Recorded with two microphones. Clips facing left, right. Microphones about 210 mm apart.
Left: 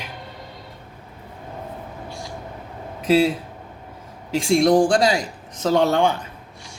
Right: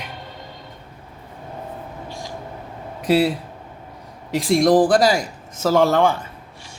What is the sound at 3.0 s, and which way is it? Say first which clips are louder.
Speech: even; centre (ahead or behind).